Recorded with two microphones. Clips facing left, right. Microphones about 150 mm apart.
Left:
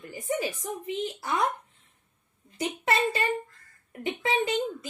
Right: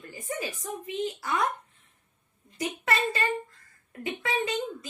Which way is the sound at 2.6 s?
20° left (ahead or behind).